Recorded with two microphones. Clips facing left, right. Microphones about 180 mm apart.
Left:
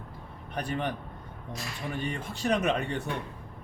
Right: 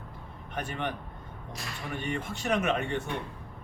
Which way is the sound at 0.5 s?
35° left (ahead or behind).